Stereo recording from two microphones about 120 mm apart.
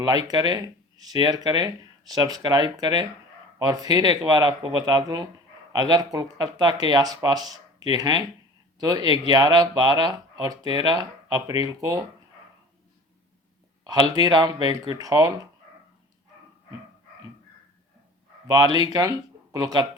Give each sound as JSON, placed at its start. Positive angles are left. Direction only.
{"t": 0.0, "sound": "speech", "side_deg": -35}
{"t": 13.8, "sound": "speech", "side_deg": -35}
{"t": 18.5, "sound": "speech", "side_deg": -35}